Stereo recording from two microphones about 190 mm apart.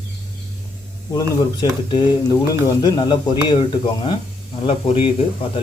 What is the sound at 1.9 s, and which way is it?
Speech, 25° left (ahead or behind).